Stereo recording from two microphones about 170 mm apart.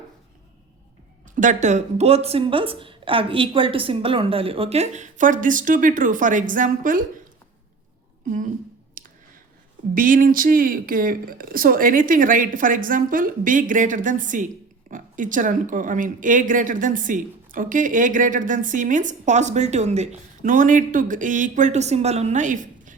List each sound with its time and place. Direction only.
1.4 s a woman's voice: 45° right (ahead or behind)
9.0 s clicking: 55° right (ahead or behind)
9.9 s speech: 55° right (ahead or behind)